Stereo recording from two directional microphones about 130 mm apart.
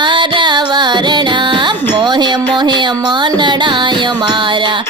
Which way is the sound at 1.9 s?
35° right (ahead or behind).